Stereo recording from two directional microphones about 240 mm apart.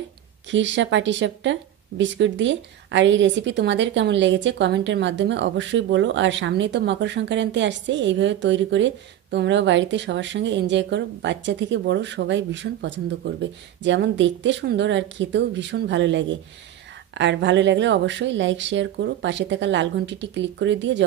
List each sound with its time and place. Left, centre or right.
0.5 s speech: right